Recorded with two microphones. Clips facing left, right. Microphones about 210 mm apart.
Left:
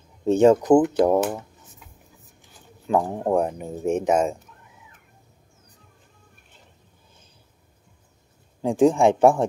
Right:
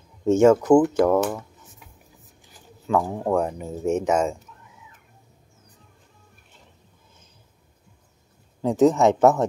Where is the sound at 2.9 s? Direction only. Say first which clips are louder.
Left 1 dB; 20° left (ahead or behind).